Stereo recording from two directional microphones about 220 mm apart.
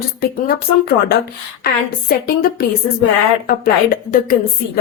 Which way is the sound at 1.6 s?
45° left (ahead or behind).